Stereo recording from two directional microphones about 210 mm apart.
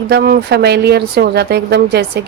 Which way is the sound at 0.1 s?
50° right (ahead or behind).